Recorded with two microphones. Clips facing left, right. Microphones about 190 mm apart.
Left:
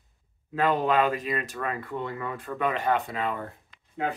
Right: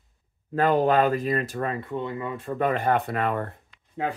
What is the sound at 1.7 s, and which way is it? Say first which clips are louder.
Speech: right 3 dB; 20° right (ahead or behind).